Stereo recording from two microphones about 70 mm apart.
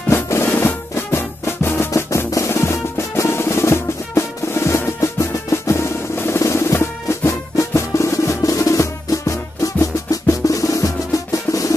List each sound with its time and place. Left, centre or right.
0.1 s music: left
2.0 s drum: left